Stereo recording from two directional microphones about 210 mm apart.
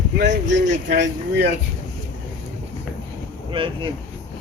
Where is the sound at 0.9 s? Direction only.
55° right (ahead or behind).